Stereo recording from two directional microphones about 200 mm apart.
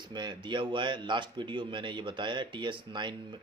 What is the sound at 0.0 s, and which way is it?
Speech, 20° right (ahead or behind).